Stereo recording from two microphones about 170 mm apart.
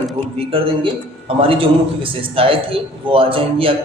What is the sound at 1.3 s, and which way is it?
A woman's voice, 35° right (ahead or behind).